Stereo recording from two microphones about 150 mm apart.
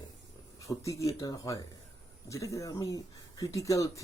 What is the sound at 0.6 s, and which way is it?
Speech, 20° left (ahead or behind).